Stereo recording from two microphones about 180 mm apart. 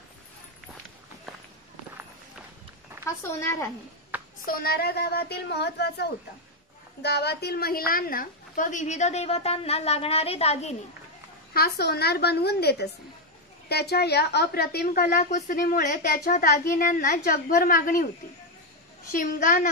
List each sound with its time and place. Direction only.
3.1 s speech: 15° left (ahead or behind)
4.1 s a sound: 10° right (ahead or behind)
4.5 s a woman's voice: 60° left (ahead or behind); by 10.8 s 35° left (ahead or behind)
11.5 s a woman's voice: 60° left (ahead or behind)
15.3 s a woman's voice: 45° left (ahead or behind)
19.1 s a woman's voice: 50° left (ahead or behind)